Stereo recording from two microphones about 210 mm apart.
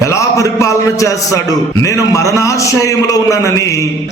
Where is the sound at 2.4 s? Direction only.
15° left (ahead or behind).